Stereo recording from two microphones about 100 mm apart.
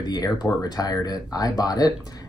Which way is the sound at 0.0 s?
45° left (ahead or behind).